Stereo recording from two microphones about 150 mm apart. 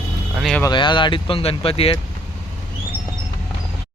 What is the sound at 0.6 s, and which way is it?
Speech, 30° left (ahead or behind).